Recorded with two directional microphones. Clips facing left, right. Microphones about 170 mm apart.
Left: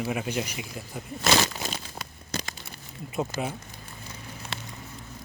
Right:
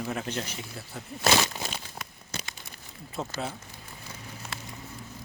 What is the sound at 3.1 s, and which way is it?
Speech, 15° left (ahead or behind).